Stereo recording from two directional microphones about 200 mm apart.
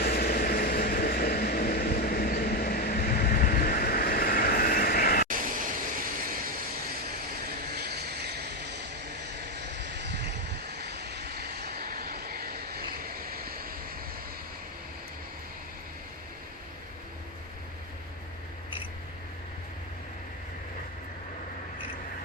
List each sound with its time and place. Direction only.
0.0 s vehicle: 50° left (ahead or behind)
5.3 s vehicle: 45° right (ahead or behind)
7.7 s vehicle: 55° right (ahead or behind)
9.6 s a sound: 60° right (ahead or behind)
10.8 s vehicle: 55° right (ahead or behind)